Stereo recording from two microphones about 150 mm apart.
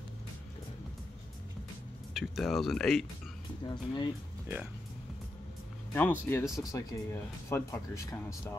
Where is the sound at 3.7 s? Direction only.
30° left (ahead or behind).